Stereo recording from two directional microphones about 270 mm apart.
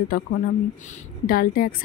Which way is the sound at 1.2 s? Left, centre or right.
Left.